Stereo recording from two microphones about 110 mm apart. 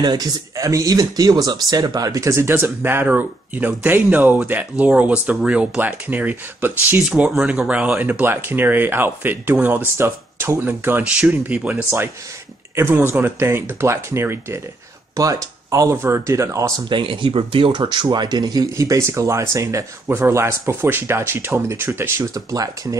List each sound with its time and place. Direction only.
0.0 s speech: 40° right (ahead or behind)
16.9 s speech: 50° right (ahead or behind); by 22.9 s 35° right (ahead or behind)